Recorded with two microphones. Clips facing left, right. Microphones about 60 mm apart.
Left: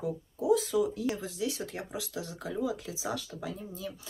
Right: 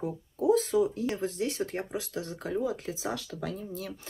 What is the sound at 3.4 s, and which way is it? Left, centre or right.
Speech, right.